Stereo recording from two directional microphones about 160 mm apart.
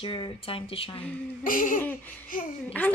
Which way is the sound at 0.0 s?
35° left (ahead or behind).